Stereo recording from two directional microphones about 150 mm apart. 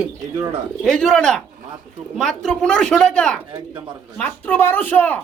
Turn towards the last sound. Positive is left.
turn(degrees=10)  # may be behind; listen again after turning